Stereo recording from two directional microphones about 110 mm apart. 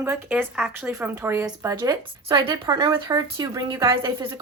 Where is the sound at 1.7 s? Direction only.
40° right (ahead or behind).